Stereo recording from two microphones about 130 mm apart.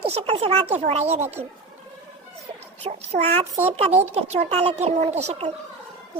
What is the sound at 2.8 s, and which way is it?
A child's voice, 55° right (ahead or behind).